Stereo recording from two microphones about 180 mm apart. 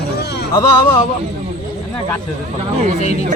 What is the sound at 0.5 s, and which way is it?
Speech, 20° left (ahead or behind).